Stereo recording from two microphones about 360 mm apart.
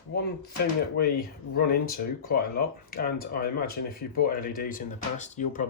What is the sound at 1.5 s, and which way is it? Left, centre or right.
Speech, left.